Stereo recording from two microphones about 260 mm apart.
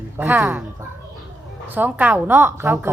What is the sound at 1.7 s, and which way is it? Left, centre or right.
Speech, centre.